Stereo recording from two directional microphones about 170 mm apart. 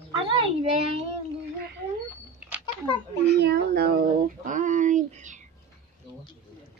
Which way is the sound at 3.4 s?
70° right (ahead or behind).